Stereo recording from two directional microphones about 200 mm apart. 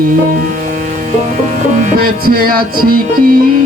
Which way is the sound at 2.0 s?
45° right (ahead or behind).